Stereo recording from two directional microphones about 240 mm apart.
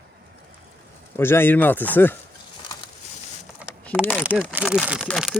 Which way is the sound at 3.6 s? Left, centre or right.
Centre.